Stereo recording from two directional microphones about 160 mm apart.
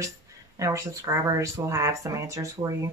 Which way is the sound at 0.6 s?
20° right (ahead or behind).